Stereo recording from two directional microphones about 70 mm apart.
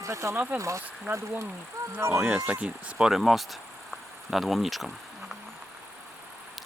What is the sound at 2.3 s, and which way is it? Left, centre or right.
Speech, right.